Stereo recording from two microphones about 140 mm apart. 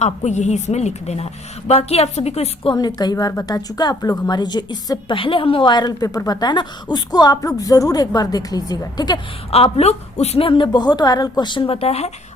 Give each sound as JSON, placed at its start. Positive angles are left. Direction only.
{"t": 0.0, "sound": "a woman's voice", "side_deg": 55}
{"t": 2.7, "sound": "a woman's voice", "side_deg": 30}
{"t": 9.5, "sound": "a woman's voice", "side_deg": 45}